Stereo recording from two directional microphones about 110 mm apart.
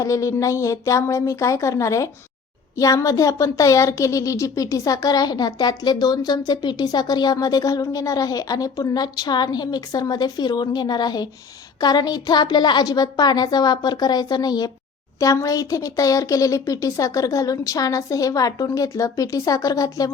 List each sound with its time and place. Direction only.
0.0 s a woman's voice: 30° left (ahead or behind)